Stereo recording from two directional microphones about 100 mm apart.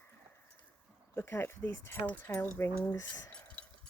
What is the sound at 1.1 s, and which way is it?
Speech, 25° left (ahead or behind).